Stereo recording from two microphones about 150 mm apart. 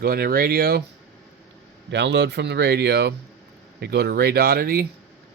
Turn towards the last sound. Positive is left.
turn(degrees=-90)